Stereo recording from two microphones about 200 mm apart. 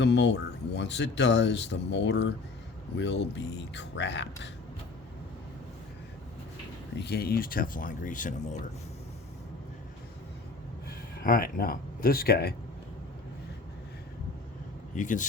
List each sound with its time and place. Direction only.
0.0 s speech: 60° left (ahead or behind)
6.9 s speech: 55° left (ahead or behind); by 8.6 s 40° left (ahead or behind)
11.2 s speech: 45° left (ahead or behind)
14.9 s speech: 40° left (ahead or behind)